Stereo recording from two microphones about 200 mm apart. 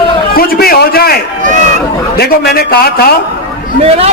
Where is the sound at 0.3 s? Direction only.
50° left (ahead or behind).